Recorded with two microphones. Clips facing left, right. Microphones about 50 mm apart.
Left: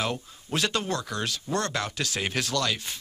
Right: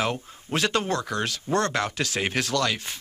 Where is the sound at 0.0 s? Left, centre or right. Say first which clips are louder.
Right 3 dB; right.